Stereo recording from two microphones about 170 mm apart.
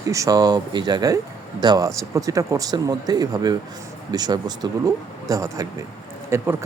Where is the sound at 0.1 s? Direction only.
20° right (ahead or behind).